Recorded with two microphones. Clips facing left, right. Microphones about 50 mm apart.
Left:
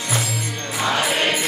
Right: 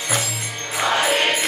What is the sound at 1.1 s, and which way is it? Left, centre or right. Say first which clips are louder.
Music: right 1 dB; right.